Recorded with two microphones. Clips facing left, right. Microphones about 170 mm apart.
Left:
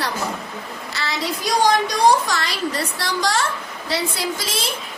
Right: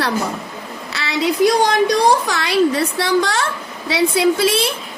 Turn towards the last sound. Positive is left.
turn(degrees=-60)  # may be behind; listen again after turning